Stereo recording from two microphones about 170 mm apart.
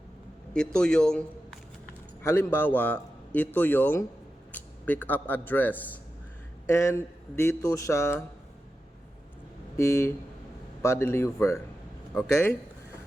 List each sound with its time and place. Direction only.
0.5 s a man's voice: 5° left (ahead or behind)
2.2 s a man's voice: 15° left (ahead or behind)
9.7 s a man's voice: 15° left (ahead or behind)